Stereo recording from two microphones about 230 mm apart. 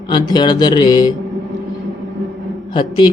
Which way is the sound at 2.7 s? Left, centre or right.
Centre.